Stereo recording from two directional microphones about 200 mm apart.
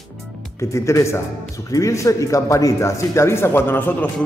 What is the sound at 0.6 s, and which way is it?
Speech, 15° left (ahead or behind).